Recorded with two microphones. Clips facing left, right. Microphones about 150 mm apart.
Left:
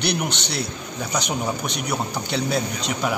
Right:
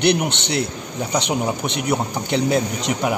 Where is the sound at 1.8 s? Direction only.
20° right (ahead or behind).